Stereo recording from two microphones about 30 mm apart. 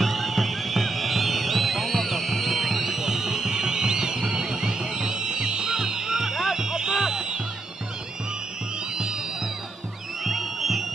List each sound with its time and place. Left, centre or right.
0.0 s music: centre; by 7.3 s right
10.2 s music: centre